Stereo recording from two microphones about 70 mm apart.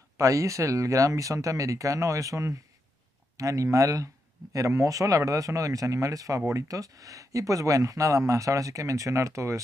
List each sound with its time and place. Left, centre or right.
0.2 s speech: right